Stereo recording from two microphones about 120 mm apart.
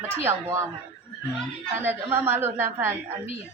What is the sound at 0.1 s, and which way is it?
Speech, 20° right (ahead or behind).